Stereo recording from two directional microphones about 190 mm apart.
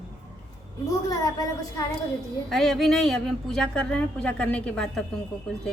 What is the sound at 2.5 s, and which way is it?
A woman's voice, centre (ahead or behind).